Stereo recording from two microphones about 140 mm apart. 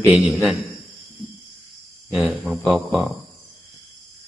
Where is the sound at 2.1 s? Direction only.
Centre (ahead or behind).